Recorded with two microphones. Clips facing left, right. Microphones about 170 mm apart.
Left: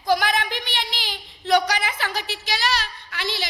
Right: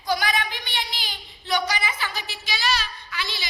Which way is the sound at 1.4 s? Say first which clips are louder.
Left 5 dB; 80° left.